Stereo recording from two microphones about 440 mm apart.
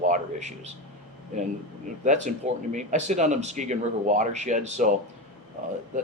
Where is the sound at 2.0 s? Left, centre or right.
Centre.